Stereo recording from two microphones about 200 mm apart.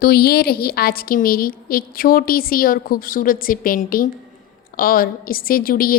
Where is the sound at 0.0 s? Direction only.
50° left (ahead or behind).